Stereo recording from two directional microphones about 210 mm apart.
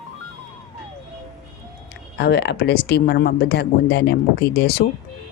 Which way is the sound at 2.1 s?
50° left (ahead or behind).